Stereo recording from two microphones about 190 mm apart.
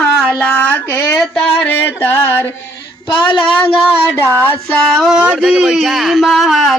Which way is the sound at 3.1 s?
25° left (ahead or behind).